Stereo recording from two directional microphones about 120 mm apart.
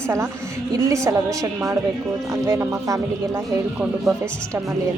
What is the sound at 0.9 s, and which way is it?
A woman's voice, 25° right (ahead or behind).